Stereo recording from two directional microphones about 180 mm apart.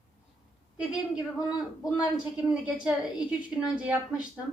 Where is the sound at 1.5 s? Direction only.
20° left (ahead or behind).